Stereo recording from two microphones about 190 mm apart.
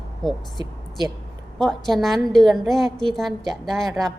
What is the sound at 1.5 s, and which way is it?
A woman's voice, centre (ahead or behind).